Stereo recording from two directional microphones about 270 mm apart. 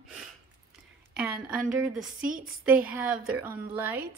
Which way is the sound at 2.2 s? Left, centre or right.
Right.